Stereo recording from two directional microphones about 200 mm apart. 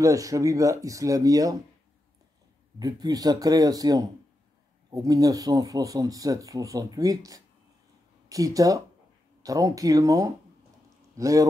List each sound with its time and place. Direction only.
0.0 s speech: 15° right (ahead or behind)
2.8 s speech: 20° right (ahead or behind)